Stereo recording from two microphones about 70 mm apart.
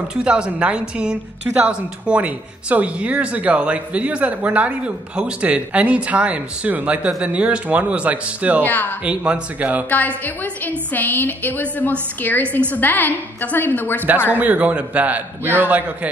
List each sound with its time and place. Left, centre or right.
0.1 s a woman's voice: centre
9.8 s a woman's voice: left
14.3 s a man's voice: right